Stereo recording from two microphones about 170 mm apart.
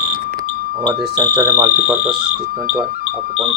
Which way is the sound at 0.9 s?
25° right (ahead or behind).